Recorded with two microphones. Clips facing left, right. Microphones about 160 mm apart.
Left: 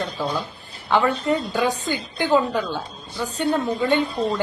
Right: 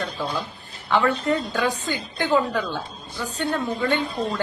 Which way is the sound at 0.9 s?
20° left (ahead or behind).